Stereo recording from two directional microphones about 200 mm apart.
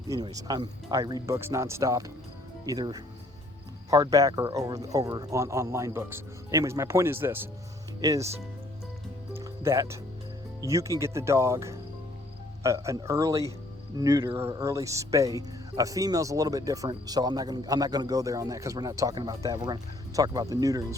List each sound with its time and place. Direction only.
0.1 s speech: 20° right (ahead or behind)
9.3 s music: 15° right (ahead or behind)
10.6 s speech: 15° right (ahead or behind)